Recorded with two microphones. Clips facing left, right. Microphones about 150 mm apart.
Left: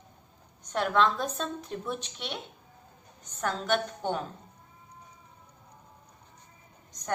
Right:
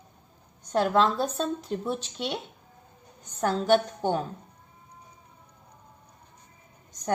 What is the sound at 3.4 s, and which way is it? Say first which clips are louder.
Speech: right 6 dB; 35° right (ahead or behind).